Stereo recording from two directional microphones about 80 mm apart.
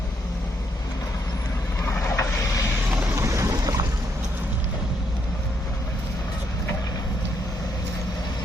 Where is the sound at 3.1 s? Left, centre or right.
Right.